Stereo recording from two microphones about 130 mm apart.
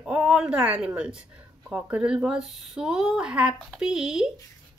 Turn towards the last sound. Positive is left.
turn(degrees=-5)  # may be behind; listen again after turning